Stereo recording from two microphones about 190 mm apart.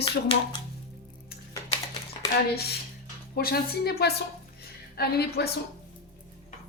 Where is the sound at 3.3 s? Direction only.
55° left (ahead or behind).